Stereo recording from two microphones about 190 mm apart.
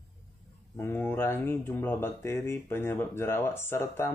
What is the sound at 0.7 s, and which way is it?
Speech, 10° left (ahead or behind).